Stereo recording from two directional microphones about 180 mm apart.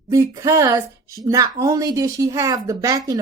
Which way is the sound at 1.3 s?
20° right (ahead or behind).